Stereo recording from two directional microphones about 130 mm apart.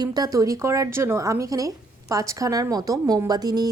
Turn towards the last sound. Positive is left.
turn(degrees=-30)  # may be behind; listen again after turning